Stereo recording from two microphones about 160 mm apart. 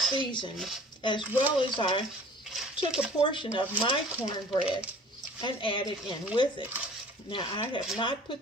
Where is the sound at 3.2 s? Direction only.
30° left (ahead or behind).